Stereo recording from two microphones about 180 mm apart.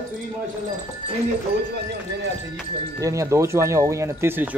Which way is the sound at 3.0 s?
20° right (ahead or behind).